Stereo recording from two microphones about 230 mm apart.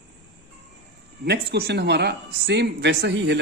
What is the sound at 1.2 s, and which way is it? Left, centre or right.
Speech, right.